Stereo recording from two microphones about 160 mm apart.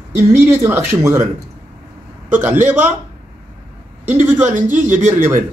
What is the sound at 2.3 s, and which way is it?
Speech, 15° right (ahead or behind).